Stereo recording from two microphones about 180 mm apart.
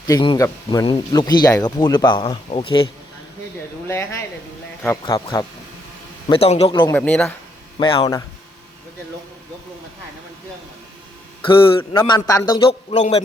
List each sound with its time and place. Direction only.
0.0 s speech: 25° left (ahead or behind)
3.8 s speech: 15° left (ahead or behind)
6.9 s speech: 10° left (ahead or behind)
7.8 s speech: 30° left (ahead or behind)
11.4 s speech: 30° left (ahead or behind)
13.0 s a man's voice: 35° left (ahead or behind)